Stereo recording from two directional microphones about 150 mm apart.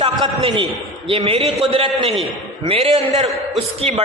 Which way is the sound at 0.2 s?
35° right (ahead or behind).